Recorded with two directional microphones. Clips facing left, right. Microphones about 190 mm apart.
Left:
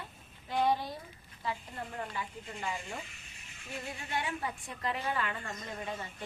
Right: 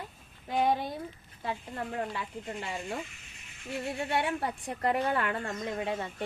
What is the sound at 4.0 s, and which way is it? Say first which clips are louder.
A woman's voice: right 6 dB; 65° right (ahead or behind).